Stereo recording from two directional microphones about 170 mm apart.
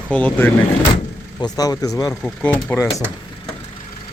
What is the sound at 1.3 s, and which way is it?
Speech, 20° left (ahead or behind).